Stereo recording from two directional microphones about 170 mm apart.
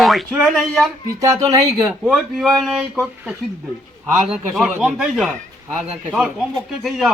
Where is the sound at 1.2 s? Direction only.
20° right (ahead or behind).